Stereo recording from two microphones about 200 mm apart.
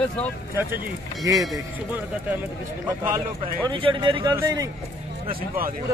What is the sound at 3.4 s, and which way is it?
A man's voice, 25° right (ahead or behind).